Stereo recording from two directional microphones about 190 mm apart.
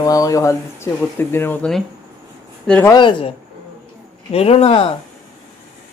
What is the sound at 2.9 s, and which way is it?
Speech, 25° left (ahead or behind).